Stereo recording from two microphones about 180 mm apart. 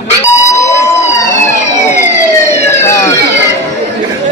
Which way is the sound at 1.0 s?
40° left (ahead or behind).